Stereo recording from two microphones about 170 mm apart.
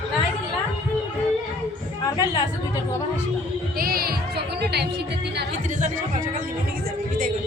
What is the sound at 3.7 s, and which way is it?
Heart sounds, 60° right (ahead or behind).